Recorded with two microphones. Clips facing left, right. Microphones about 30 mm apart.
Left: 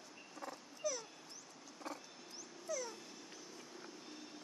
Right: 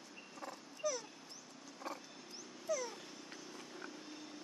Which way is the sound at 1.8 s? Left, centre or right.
Centre.